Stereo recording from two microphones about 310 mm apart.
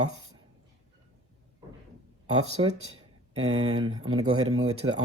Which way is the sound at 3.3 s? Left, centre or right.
Centre.